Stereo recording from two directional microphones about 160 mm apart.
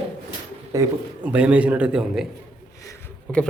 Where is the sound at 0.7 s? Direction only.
20° right (ahead or behind).